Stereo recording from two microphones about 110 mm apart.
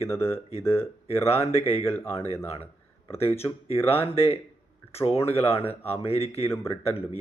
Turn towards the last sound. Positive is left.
turn(degrees=65)  # may be behind; listen again after turning